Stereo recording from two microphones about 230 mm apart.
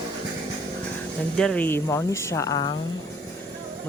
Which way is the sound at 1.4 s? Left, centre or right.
Centre.